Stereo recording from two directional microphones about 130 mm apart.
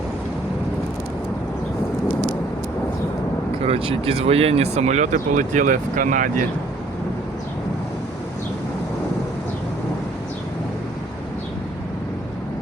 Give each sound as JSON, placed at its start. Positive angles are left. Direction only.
{"t": 3.7, "sound": "speech", "side_deg": -50}